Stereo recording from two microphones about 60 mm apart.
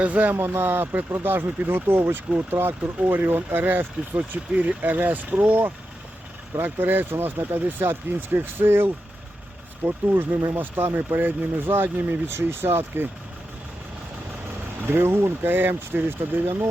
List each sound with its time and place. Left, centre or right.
0.0 s speech: right
0.3 s speech: right
14.9 s speech: right